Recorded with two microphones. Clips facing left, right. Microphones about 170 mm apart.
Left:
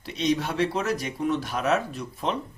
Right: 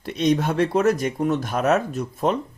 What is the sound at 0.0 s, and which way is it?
Speech, 50° right (ahead or behind).